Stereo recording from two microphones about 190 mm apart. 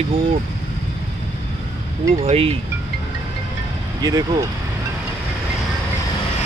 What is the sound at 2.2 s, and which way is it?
Speech, 30° right (ahead or behind).